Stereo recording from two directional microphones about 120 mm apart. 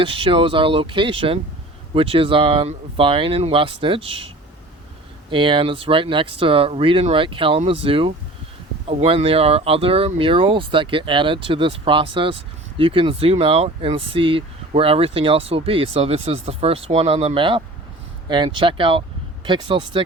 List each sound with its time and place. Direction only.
0.0 s speech: 45° right (ahead or behind)
5.3 s speech: 45° right (ahead or behind)
18.3 s speech: 40° right (ahead or behind)